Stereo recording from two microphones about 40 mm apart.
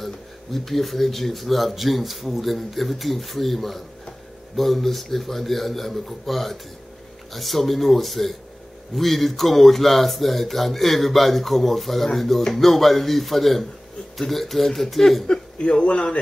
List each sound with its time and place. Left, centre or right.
0.0 s speech: centre
15.6 s speech: left